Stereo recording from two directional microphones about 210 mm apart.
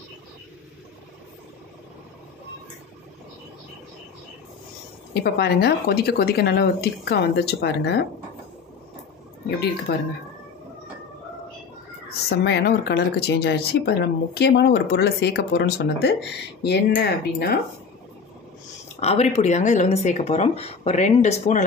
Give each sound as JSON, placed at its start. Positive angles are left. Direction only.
{"t": 5.2, "sound": "speech", "side_deg": 50}
{"t": 9.9, "sound": "speech", "side_deg": 50}
{"t": 12.1, "sound": "speech", "side_deg": 50}
{"t": 18.9, "sound": "speech", "side_deg": 30}